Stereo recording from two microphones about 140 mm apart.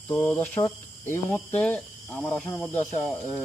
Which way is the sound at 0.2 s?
15° left (ahead or behind).